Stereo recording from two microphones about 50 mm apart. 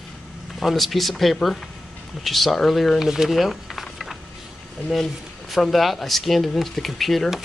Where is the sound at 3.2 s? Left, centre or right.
Centre.